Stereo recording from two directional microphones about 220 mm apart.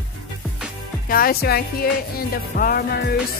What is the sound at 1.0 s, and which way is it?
Speech, 40° left (ahead or behind).